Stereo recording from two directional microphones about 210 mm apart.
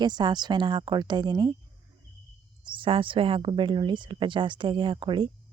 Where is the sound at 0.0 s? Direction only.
20° right (ahead or behind).